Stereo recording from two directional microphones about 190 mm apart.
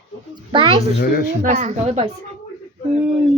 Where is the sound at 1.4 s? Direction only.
40° right (ahead or behind).